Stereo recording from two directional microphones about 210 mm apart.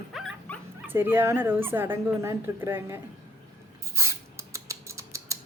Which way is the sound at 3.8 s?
15° right (ahead or behind).